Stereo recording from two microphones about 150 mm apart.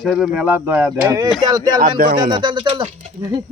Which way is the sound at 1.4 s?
25° right (ahead or behind).